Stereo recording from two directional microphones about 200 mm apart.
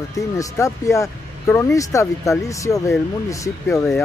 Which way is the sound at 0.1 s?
15° left (ahead or behind).